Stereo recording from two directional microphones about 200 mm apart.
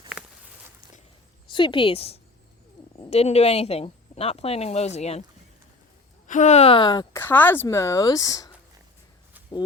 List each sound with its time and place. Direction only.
1.5 s a woman's voice: 25° left (ahead or behind)
6.2 s speech: 40° left (ahead or behind); by 8.4 s 15° left (ahead or behind)